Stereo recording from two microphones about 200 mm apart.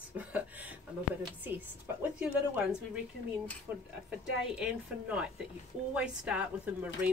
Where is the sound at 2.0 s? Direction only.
5° right (ahead or behind).